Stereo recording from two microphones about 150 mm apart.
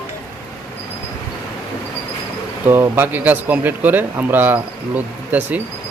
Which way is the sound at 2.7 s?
15° right (ahead or behind).